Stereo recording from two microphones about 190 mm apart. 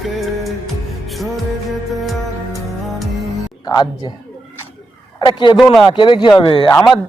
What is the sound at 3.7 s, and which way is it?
Speech, 20° left (ahead or behind).